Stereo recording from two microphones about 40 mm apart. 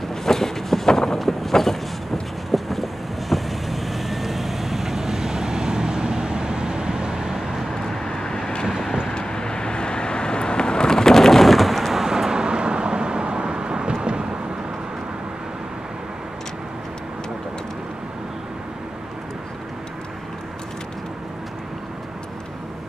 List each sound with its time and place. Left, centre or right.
0.1 s vehicle: centre
7.7 s vehicle: centre
12.0 s vehicle: centre